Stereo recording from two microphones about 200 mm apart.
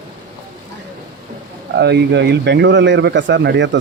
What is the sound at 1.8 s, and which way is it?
Speech, 55° right (ahead or behind).